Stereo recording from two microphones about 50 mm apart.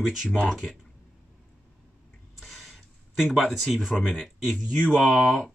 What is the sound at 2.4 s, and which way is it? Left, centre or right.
Speech, centre.